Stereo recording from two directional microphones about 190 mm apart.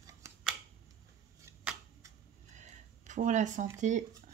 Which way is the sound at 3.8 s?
40° right (ahead or behind).